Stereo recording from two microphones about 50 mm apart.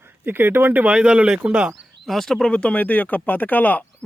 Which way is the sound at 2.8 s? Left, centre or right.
Left.